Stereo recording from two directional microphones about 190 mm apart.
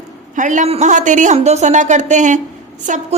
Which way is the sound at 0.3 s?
40° right (ahead or behind).